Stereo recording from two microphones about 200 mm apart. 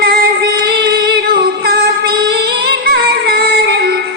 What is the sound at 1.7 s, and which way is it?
Music, 50° right (ahead or behind).